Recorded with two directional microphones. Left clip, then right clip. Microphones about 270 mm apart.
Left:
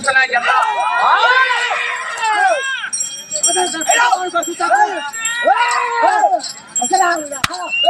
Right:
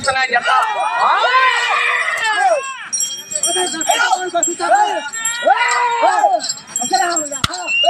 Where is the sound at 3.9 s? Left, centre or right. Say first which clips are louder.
Left 2 dB; centre.